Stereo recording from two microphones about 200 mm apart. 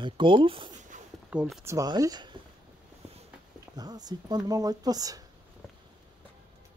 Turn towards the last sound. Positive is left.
turn(degrees=-20)  # may be behind; listen again after turning